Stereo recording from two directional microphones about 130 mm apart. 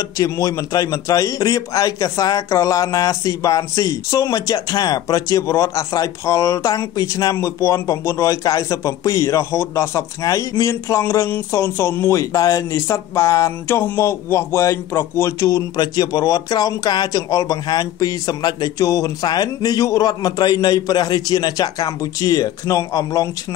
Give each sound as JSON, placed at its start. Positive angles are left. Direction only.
{"t": 0.2, "sound": "a man's voice", "side_deg": 25}